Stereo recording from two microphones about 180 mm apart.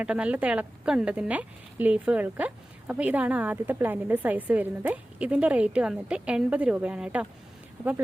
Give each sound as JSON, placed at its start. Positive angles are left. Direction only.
{"t": 0.0, "sound": "a woman's voice", "side_deg": -5}